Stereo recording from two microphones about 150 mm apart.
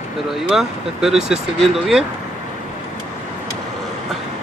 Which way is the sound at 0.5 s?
5° right (ahead or behind).